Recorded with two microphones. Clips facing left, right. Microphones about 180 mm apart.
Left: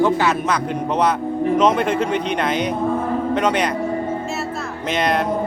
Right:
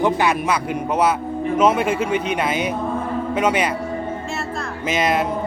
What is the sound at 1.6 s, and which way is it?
A man's voice, 5° right (ahead or behind).